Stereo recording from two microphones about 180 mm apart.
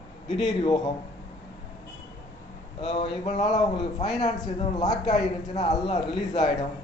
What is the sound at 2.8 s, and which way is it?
Speech, 25° left (ahead or behind).